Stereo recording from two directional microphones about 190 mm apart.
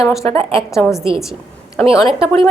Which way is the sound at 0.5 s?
15° left (ahead or behind).